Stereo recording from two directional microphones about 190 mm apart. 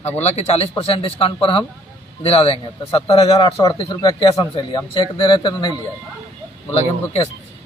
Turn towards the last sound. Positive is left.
turn(degrees=30)  # may be behind; listen again after turning